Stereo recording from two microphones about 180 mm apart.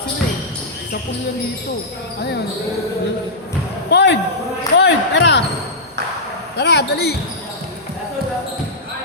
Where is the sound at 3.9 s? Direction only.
70° left (ahead or behind).